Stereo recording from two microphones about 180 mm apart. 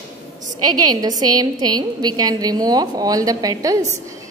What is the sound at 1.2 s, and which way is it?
A woman's voice, 20° right (ahead or behind).